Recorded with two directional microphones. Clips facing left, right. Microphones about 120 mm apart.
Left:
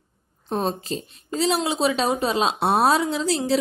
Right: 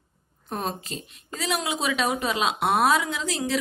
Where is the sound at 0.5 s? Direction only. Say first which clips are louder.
Left 6 dB; 30° left (ahead or behind).